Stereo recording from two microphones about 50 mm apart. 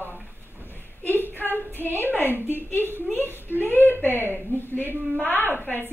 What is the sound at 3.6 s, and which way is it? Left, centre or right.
A woman's voice, left.